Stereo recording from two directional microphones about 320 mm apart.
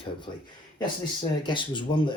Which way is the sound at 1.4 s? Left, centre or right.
Centre.